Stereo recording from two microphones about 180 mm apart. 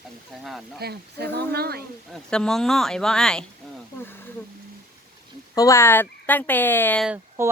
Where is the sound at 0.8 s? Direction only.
65° right (ahead or behind).